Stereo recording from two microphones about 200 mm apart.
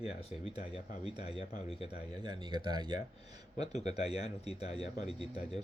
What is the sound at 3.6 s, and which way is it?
Speech, 35° left (ahead or behind).